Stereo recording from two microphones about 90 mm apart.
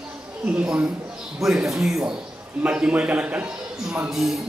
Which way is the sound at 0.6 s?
10° right (ahead or behind).